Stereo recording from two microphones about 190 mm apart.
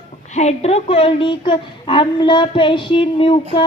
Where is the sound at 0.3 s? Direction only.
35° left (ahead or behind).